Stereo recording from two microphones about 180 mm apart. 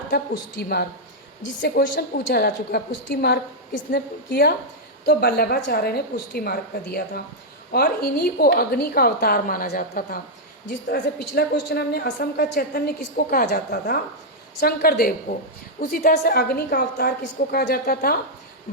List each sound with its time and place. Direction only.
0.5 s a woman's voice: 65° left (ahead or behind)